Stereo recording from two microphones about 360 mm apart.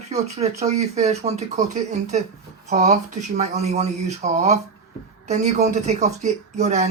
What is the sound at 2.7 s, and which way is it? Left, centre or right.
Speech, centre.